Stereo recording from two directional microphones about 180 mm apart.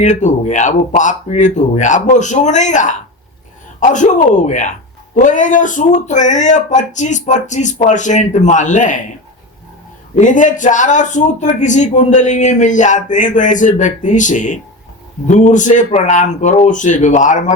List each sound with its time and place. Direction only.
0.0 s speech: 40° left (ahead or behind)
10.2 s speech: 45° left (ahead or behind)